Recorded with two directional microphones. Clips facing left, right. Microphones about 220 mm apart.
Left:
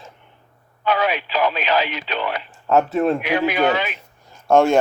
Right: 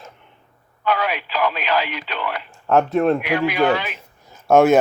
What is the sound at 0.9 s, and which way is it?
Speech, 20° left (ahead or behind).